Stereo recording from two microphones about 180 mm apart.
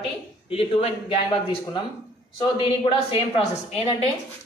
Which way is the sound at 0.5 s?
30° left (ahead or behind).